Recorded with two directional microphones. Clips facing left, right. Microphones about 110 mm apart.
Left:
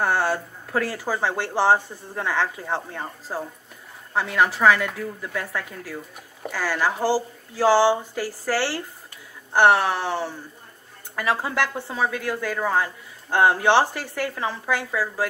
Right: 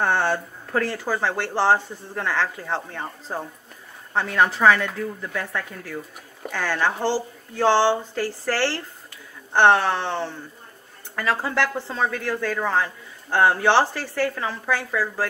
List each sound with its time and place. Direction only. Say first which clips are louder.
0.0 s speech: right 1 dB; 10° left (ahead or behind)